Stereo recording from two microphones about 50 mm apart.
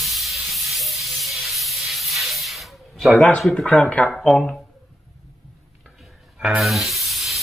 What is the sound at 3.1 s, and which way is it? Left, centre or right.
Speech, left.